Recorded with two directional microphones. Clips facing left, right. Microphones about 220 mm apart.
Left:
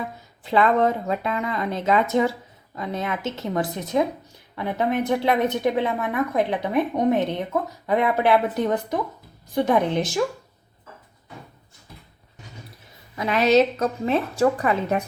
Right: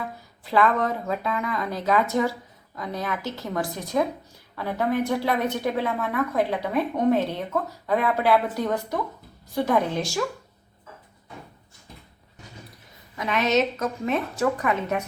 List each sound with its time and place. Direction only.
0.4 s speech: 25° left (ahead or behind)
13.1 s a woman's voice: 35° left (ahead or behind)